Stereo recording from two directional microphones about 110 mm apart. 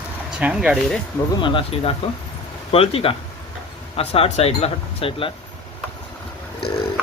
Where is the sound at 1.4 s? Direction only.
55° left (ahead or behind).